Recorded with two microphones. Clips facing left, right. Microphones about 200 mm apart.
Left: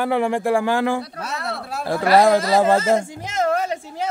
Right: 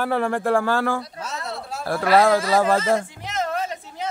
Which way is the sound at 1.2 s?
60° left (ahead or behind).